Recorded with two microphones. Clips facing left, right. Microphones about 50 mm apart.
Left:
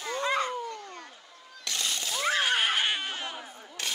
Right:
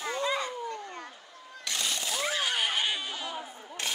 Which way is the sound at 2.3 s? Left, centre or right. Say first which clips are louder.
Left 6 dB; left.